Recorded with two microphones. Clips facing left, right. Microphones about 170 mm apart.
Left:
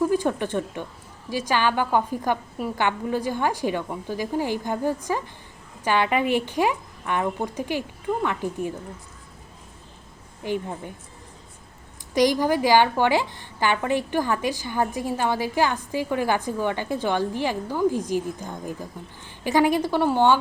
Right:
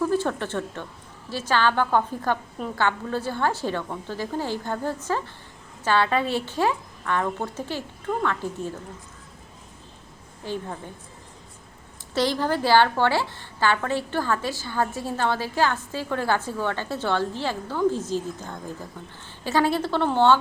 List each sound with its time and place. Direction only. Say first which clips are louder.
0.0 s a woman's voice: left 2 dB; 15° left (ahead or behind)
10.4 s a woman's voice: left 3 dB; 15° left (ahead or behind)
12.1 s a woman's voice: left 4 dB; 15° left (ahead or behind)